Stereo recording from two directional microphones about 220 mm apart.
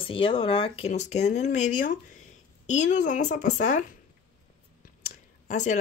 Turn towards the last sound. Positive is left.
turn(degrees=35)  # may be behind; listen again after turning